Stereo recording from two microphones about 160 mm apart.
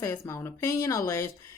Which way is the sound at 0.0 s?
15° left (ahead or behind).